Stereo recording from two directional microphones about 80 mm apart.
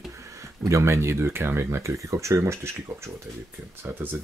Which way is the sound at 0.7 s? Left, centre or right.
Right.